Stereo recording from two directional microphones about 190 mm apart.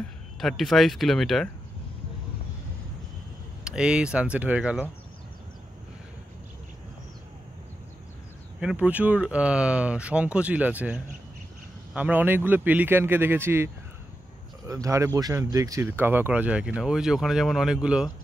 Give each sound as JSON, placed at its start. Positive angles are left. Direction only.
{"t": 0.4, "sound": "speech", "side_deg": 0}
{"t": 3.6, "sound": "speech", "side_deg": -5}
{"t": 8.5, "sound": "speech", "side_deg": -5}
{"t": 14.7, "sound": "speech", "side_deg": -15}